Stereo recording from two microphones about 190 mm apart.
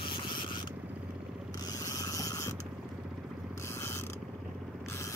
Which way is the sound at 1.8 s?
15° left (ahead or behind).